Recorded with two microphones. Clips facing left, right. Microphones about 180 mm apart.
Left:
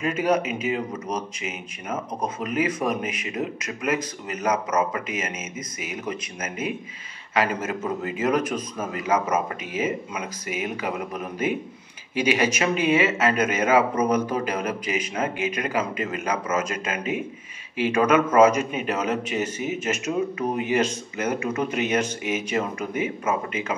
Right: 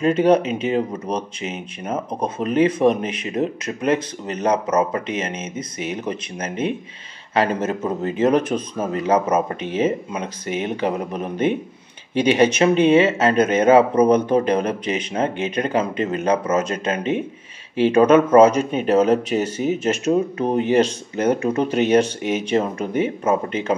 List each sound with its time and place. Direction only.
0.0 s speech: 30° right (ahead or behind)